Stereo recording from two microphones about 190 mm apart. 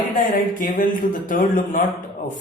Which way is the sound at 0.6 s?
45° left (ahead or behind).